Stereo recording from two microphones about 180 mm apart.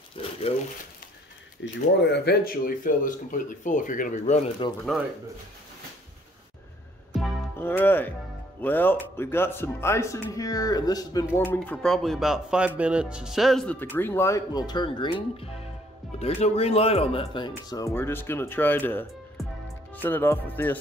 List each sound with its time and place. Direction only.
0.2 s a sound: 30° left (ahead or behind)
1.6 s speech: 75° left (ahead or behind); by 4.5 s 40° left (ahead or behind)
4.9 s a man's voice: centre (ahead or behind)
7.5 s speech: 10° left (ahead or behind)